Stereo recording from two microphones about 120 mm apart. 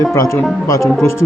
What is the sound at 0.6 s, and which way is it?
Speech, 25° left (ahead or behind).